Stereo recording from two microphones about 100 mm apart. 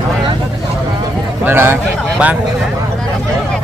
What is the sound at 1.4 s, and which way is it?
Speech, 20° right (ahead or behind).